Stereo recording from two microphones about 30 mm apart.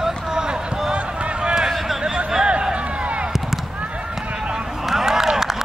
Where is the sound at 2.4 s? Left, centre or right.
Right.